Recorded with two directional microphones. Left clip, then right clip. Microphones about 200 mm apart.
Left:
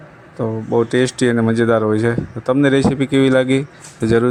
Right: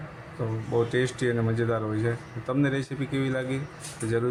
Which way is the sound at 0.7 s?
40° left (ahead or behind).